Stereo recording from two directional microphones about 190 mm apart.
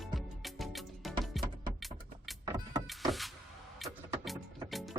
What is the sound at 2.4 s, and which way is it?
Vehicle, 20° right (ahead or behind).